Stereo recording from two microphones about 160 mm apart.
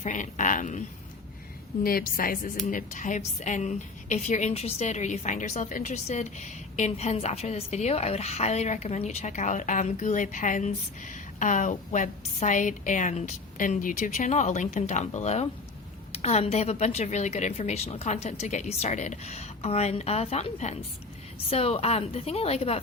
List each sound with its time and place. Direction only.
0.0 s a woman's voice: 50° left (ahead or behind)
1.8 s a woman's voice: 65° left (ahead or behind)
2.6 s a woman's voice: 50° left (ahead or behind)